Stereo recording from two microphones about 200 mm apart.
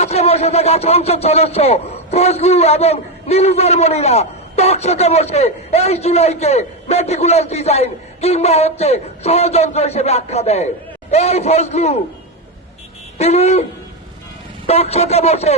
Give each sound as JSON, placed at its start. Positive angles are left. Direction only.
{"t": 0.0, "sound": "speech", "side_deg": 30}
{"t": 13.1, "sound": "speech", "side_deg": 30}
{"t": 14.7, "sound": "speech", "side_deg": 30}